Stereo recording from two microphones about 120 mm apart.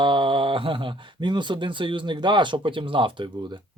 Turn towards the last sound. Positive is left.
turn(degrees=-45)  # may be behind; listen again after turning